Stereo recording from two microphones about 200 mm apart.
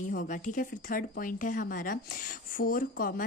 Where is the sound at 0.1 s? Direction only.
40° left (ahead or behind).